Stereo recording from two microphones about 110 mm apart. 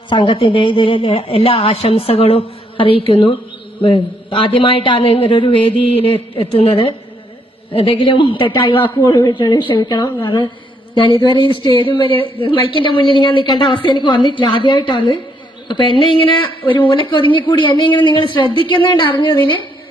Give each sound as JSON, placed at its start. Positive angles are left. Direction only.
{"t": 0.1, "sound": "a woman's voice", "side_deg": 50}